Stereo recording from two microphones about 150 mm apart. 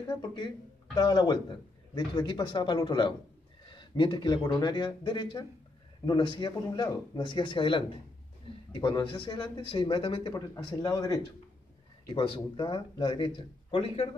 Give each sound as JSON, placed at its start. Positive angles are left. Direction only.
{"t": 0.0, "sound": "speech", "side_deg": 25}
{"t": 10.3, "sound": "speech", "side_deg": 25}
{"t": 12.1, "sound": "speech", "side_deg": 35}